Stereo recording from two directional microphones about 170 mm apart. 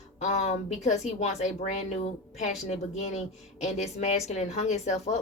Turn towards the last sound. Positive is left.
turn(degrees=40)  # may be behind; listen again after turning